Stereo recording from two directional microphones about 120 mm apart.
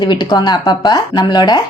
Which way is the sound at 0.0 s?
35° left (ahead or behind).